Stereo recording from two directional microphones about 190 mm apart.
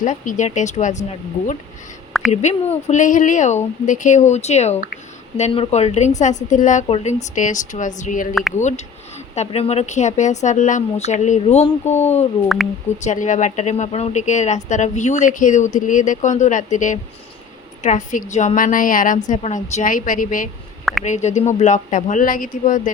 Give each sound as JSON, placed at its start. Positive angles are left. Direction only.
{"t": 0.0, "sound": "a woman's voice", "side_deg": 40}
{"t": 2.3, "sound": "a woman's voice", "side_deg": 35}